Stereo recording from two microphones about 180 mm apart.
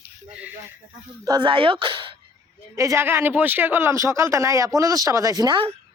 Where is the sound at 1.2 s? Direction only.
25° right (ahead or behind).